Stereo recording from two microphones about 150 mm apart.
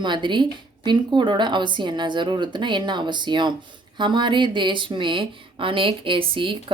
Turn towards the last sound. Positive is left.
turn(degrees=-35)  # may be behind; listen again after turning